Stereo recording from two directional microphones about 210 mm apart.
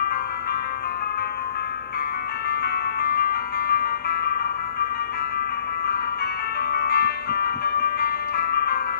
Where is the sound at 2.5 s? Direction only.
50° left (ahead or behind).